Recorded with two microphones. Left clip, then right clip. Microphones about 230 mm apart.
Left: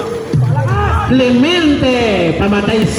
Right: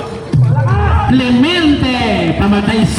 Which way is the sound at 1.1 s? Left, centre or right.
Right.